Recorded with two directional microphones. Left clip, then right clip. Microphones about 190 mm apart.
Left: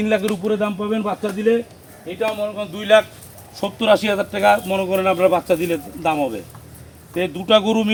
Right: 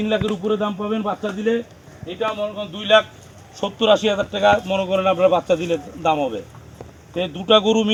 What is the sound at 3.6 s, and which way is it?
Speech, 15° right (ahead or behind).